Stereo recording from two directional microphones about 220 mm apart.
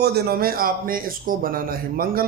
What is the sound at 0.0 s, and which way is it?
A man's voice, 45° right (ahead or behind).